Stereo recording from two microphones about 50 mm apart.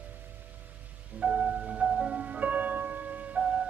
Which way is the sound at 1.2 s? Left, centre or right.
Right.